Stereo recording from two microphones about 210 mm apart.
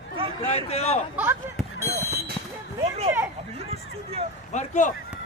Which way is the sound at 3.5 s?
30° right (ahead or behind).